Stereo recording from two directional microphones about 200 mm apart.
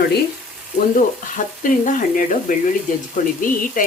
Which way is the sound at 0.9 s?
40° left (ahead or behind).